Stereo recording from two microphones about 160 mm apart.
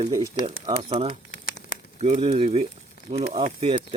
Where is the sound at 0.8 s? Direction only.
35° right (ahead or behind).